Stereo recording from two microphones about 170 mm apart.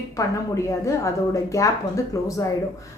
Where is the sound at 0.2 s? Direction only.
20° left (ahead or behind).